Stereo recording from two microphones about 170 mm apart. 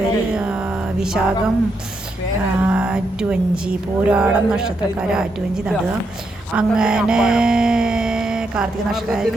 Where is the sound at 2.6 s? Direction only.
5° right (ahead or behind).